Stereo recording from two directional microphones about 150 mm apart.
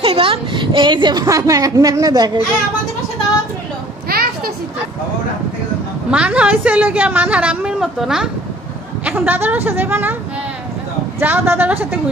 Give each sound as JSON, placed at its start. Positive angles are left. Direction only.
{"t": 0.0, "sound": "a woman's voice", "side_deg": -35}
{"t": 4.1, "sound": "a sound", "side_deg": -90}
{"t": 6.0, "sound": "a woman's voice", "side_deg": -10}
{"t": 11.1, "sound": "a woman's voice", "side_deg": -15}